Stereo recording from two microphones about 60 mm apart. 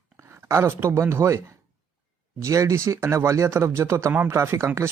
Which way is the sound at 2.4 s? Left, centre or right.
Right.